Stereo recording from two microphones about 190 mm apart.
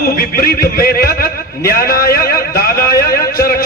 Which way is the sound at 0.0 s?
50° left (ahead or behind).